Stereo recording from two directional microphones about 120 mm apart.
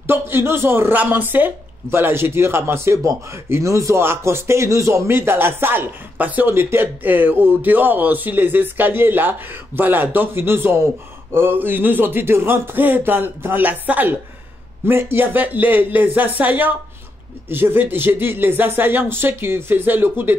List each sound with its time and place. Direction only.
0.0 s speech: 20° right (ahead or behind)